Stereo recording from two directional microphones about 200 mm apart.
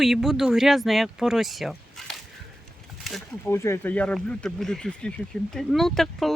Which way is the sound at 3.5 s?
15° left (ahead or behind).